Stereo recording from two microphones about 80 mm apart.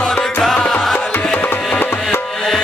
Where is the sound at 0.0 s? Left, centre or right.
Centre.